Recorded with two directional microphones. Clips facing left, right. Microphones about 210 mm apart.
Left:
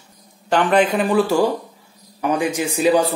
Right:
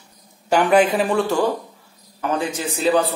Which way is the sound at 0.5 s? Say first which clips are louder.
Right 1 dB; 10° right (ahead or behind).